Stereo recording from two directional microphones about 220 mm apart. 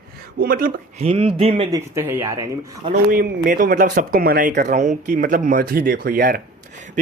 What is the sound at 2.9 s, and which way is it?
Speech, 40° right (ahead or behind).